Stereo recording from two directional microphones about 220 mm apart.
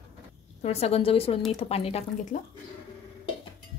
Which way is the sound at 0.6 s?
30° left (ahead or behind).